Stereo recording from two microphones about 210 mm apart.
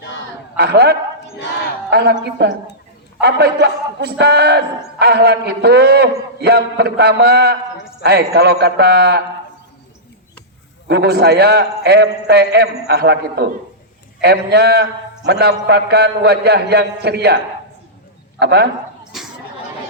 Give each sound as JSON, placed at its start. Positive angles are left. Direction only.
{"t": 0.0, "sound": "a sound", "side_deg": 60}
{"t": 0.5, "sound": "a man's voice", "side_deg": -50}
{"t": 10.8, "sound": "a man's voice", "side_deg": -50}
{"t": 18.3, "sound": "a man's voice", "side_deg": -50}